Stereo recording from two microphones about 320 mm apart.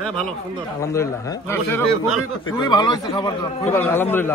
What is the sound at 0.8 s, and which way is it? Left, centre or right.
A man's voice, centre.